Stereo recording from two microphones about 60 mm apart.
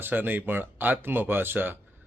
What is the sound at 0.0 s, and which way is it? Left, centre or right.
Speech, right.